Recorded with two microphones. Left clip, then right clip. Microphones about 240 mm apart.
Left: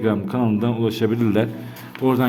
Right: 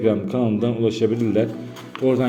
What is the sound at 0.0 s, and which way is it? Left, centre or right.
A man's voice, centre.